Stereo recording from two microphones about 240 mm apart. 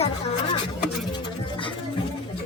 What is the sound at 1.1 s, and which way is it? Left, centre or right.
Music, centre.